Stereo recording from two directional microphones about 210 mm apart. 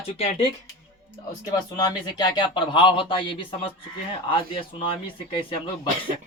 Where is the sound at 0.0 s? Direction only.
30° left (ahead or behind).